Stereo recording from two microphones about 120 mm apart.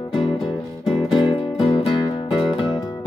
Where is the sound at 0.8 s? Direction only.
40° left (ahead or behind).